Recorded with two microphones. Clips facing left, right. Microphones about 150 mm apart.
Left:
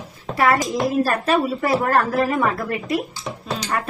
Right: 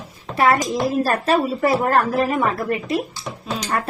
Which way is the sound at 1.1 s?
35° right (ahead or behind).